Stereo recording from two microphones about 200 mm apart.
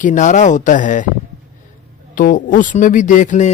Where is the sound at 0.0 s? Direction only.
40° left (ahead or behind).